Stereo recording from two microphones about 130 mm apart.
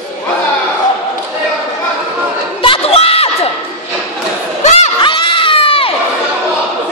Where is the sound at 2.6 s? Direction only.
45° left (ahead or behind).